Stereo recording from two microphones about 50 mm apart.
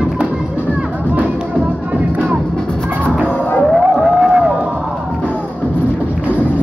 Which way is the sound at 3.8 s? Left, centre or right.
Centre.